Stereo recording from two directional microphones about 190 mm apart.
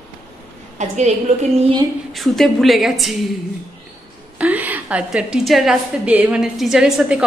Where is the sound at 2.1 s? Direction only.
Centre (ahead or behind).